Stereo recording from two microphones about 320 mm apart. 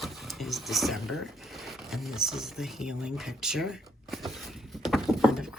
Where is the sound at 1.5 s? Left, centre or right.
Centre.